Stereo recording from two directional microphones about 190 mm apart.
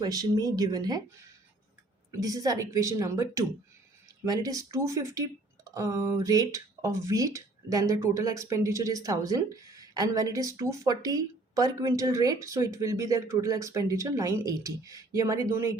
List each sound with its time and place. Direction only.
0.0 s a woman's voice: 20° right (ahead or behind)
2.2 s a woman's voice: 20° right (ahead or behind)